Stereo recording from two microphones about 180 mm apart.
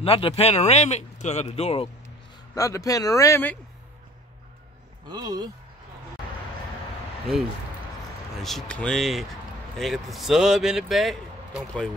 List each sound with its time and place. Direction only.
0.0 s speech: 30° left (ahead or behind)
2.5 s a man's voice: 20° left (ahead or behind)
5.1 s speech: 20° right (ahead or behind)
7.3 s speech: centre (ahead or behind)